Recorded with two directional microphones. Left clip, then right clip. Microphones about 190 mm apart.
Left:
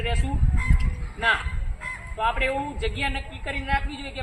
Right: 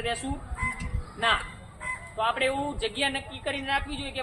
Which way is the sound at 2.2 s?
20° right (ahead or behind).